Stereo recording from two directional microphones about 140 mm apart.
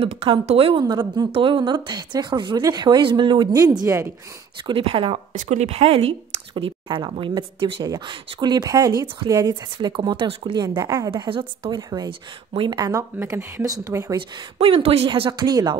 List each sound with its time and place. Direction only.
0.0 s speech: 45° right (ahead or behind)
3.5 s speech: 25° right (ahead or behind)
4.6 s speech: 40° right (ahead or behind)
5.3 s speech: 60° right (ahead or behind); by 11.1 s 25° right (ahead or behind)
11.1 s speech: 35° right (ahead or behind)
14.1 s speech: 40° right (ahead or behind)